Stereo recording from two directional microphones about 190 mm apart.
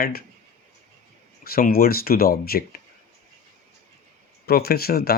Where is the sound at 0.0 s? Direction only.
55° left (ahead or behind).